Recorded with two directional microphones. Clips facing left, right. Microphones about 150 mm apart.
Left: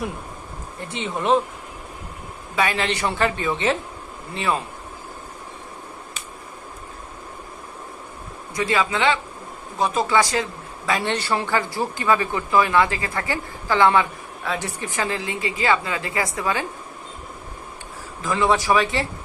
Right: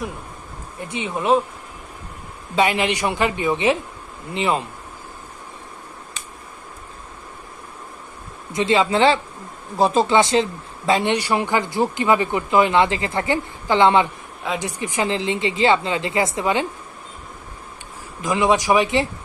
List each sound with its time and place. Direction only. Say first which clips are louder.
0.9 s a woman's voice: right 1 dB; 10° right (ahead or behind)
2.5 s a woman's voice: right 4 dB; 20° right (ahead or behind)
8.5 s speech: right 5 dB; 25° right (ahead or behind)
18.2 s a woman's voice: right 2 dB; 15° right (ahead or behind)